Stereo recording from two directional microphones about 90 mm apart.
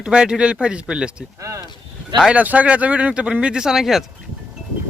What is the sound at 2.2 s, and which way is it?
Speech, 15° right (ahead or behind).